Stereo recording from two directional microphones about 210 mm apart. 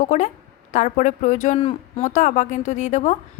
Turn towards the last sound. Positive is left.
turn(degrees=35)  # may be behind; listen again after turning